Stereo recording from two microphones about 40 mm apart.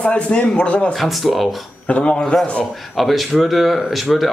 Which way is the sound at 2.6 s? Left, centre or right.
Centre.